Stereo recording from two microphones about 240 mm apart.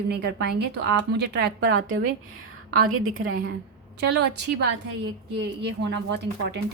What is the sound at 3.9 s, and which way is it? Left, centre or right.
A woman's voice, right.